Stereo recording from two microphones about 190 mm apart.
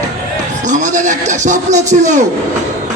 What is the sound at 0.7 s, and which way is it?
A man's voice, 40° right (ahead or behind).